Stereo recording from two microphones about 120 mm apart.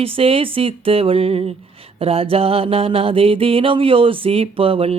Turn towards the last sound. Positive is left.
turn(degrees=-50)  # may be behind; listen again after turning